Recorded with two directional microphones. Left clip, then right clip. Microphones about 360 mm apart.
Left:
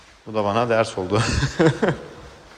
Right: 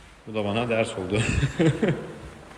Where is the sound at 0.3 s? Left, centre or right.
Centre.